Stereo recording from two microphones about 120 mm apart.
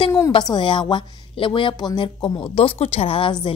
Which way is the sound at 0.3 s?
40° left (ahead or behind).